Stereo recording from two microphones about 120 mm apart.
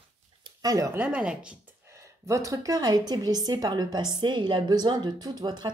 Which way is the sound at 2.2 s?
30° right (ahead or behind).